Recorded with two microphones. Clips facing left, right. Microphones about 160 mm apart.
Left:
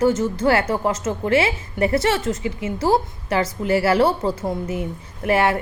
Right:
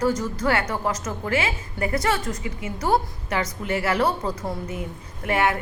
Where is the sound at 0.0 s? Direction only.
25° left (ahead or behind).